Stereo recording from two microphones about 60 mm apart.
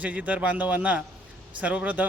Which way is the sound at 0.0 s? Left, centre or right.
Right.